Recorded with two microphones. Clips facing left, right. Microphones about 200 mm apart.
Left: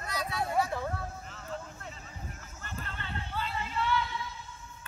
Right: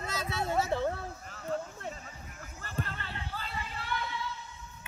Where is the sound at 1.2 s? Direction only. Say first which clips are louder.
Right 5 dB; 45° right (ahead or behind).